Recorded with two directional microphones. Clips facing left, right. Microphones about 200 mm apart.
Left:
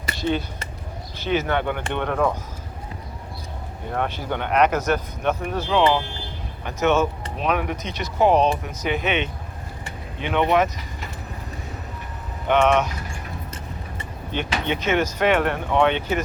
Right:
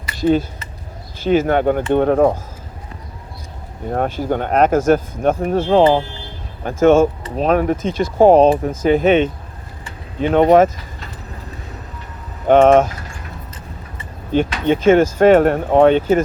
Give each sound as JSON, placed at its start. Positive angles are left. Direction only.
{"t": 1.2, "sound": "speech", "side_deg": -45}
{"t": 3.9, "sound": "speech", "side_deg": -40}
{"t": 12.5, "sound": "speech", "side_deg": -45}
{"t": 14.6, "sound": "speech", "side_deg": -45}